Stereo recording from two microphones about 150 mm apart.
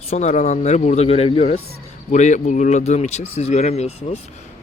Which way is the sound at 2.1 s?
55° left (ahead or behind).